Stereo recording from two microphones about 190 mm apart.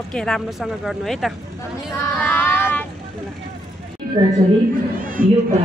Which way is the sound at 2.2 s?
10° left (ahead or behind).